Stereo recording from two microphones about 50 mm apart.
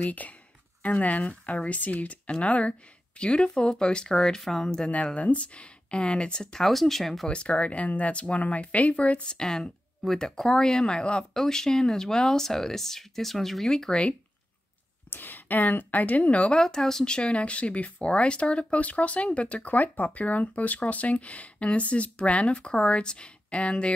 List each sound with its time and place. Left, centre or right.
0.0 s speech: left; by 4.9 s centre
5.0 s speech: left; by 7.2 s centre
7.2 s speech: left
15.0 s speech: left
16.5 s speech: centre